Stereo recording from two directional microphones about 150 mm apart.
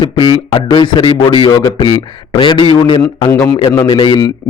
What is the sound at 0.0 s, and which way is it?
A man's voice, 30° left (ahead or behind).